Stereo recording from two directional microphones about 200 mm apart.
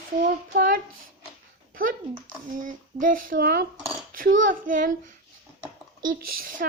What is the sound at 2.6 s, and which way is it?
Speech, 40° right (ahead or behind).